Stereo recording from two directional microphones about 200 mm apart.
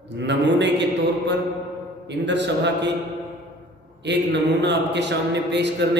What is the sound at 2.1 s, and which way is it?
Speech, 60° right (ahead or behind).